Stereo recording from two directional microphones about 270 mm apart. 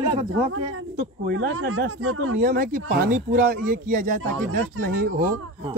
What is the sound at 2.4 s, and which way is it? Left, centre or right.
Speech, right.